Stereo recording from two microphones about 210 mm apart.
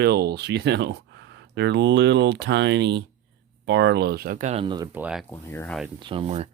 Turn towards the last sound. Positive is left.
turn(degrees=-30)  # may be behind; listen again after turning